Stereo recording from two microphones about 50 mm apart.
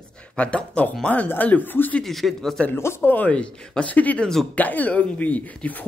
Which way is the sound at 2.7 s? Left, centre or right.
Left.